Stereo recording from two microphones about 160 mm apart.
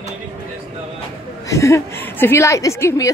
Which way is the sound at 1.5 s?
20° left (ahead or behind).